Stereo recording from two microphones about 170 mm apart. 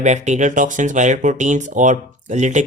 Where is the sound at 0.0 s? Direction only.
45° right (ahead or behind).